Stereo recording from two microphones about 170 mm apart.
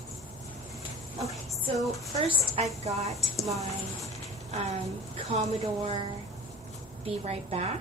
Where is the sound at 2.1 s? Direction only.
35° right (ahead or behind).